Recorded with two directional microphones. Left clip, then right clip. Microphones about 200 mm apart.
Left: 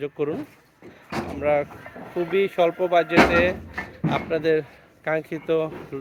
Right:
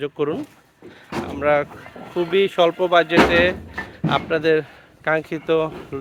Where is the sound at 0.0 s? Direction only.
10° right (ahead or behind).